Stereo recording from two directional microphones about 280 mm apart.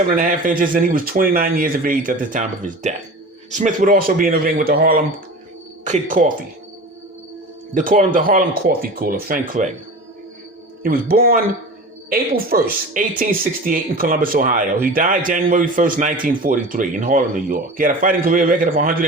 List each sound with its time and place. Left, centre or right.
0.1 s a man's voice: right
7.7 s speech: right
10.8 s a man's voice: right